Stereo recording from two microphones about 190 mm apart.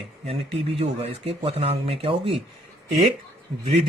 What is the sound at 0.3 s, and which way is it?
Speech, 30° right (ahead or behind).